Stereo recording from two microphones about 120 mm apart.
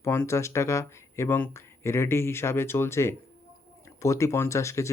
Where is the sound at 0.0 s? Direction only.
20° left (ahead or behind).